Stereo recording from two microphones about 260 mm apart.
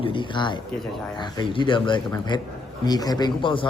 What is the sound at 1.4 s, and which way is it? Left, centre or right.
Speech, centre.